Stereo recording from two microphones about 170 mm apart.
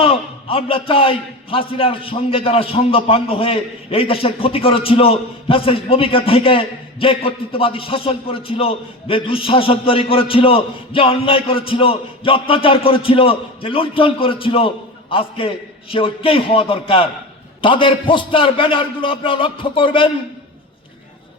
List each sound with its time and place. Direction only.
0.0 s a man's voice: 35° left (ahead or behind)